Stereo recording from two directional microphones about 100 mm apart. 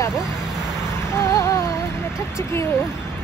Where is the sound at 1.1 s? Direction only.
30° left (ahead or behind).